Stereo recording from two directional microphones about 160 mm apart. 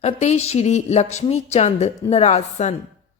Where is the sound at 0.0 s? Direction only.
45° left (ahead or behind).